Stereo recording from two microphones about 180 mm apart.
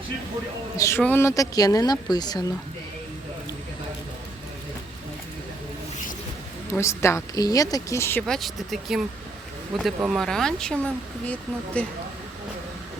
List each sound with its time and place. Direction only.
0.8 s speech: 15° left (ahead or behind)
6.7 s a woman's voice: 15° left (ahead or behind)
8.3 s speech: centre (ahead or behind)